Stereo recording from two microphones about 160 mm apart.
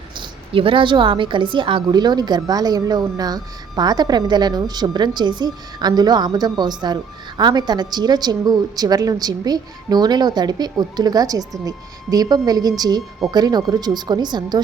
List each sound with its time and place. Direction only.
0.2 s a woman's voice: 35° right (ahead or behind)